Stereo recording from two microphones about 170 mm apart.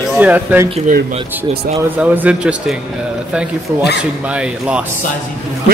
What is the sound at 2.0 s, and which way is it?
Speech, 10° right (ahead or behind).